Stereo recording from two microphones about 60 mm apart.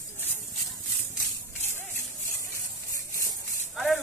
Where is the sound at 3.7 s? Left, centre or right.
Centre.